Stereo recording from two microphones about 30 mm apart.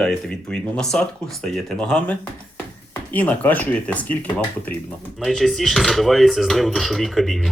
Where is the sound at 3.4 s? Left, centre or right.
Left.